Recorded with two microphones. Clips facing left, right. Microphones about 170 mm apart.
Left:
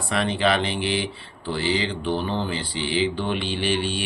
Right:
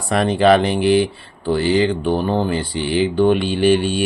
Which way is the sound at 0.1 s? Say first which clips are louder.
Right 9 dB; 45° right (ahead or behind).